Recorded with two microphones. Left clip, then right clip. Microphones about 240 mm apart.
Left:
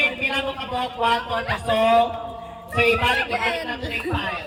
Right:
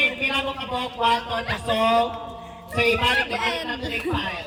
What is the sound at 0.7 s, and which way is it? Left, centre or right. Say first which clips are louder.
Speech: even; right.